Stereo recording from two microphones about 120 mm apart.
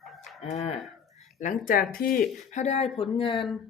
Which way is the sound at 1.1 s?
90° left.